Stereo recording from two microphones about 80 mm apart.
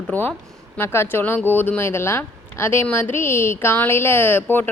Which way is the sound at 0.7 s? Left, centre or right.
Left.